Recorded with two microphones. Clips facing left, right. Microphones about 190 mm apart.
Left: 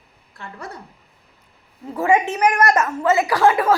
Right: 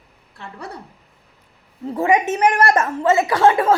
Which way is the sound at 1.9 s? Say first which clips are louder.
Right 1 dB; 25° right (ahead or behind).